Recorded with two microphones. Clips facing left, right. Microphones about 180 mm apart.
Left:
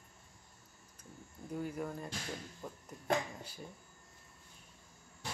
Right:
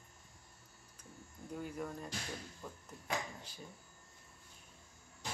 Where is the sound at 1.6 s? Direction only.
10° left (ahead or behind).